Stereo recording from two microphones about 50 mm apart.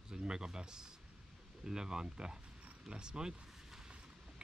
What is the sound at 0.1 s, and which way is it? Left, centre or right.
Speech, centre.